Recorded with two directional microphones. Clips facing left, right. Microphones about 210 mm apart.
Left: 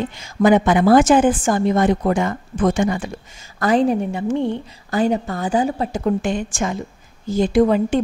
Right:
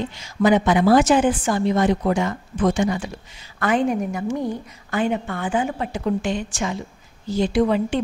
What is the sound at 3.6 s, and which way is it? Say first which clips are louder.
A woman's voice: left 4 dB; 35° left (ahead or behind).